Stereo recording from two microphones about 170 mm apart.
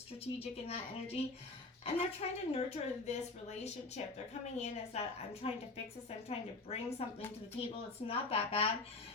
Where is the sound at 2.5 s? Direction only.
40° left (ahead or behind).